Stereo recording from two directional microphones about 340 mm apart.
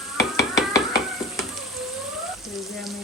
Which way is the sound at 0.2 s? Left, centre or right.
Centre.